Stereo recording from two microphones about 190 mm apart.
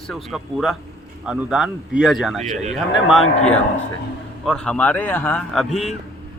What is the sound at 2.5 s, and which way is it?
Speech, 35° right (ahead or behind).